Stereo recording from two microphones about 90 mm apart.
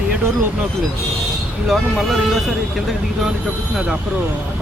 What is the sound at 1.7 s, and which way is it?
Speech, centre (ahead or behind).